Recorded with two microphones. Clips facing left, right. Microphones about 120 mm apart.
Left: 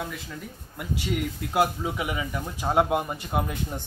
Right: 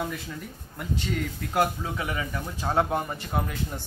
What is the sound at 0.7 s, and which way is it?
Speech, 10° left (ahead or behind).